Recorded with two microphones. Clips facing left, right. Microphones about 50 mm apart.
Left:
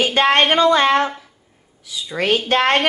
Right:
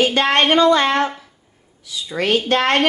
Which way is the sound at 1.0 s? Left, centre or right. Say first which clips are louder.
Right 1 dB; centre.